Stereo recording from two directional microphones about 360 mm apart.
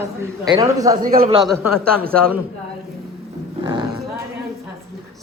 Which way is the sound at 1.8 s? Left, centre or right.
Right.